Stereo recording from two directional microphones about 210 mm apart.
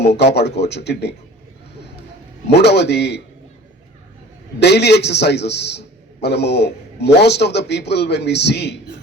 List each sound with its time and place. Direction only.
0.2 s a man's voice: 55° left (ahead or behind)
2.5 s a man's voice: 55° left (ahead or behind)
4.6 s a man's voice: 55° left (ahead or behind)